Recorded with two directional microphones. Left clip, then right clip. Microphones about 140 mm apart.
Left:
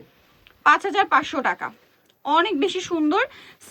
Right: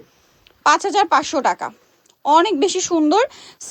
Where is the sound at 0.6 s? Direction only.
45° right (ahead or behind).